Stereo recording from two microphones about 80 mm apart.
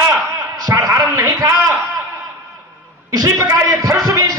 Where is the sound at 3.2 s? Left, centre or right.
Right.